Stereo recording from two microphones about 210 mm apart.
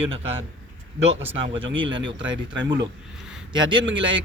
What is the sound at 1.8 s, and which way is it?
Speech, 25° right (ahead or behind).